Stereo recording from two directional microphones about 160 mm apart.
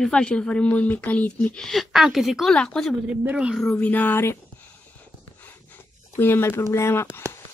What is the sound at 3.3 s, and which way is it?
Speech, 5° right (ahead or behind).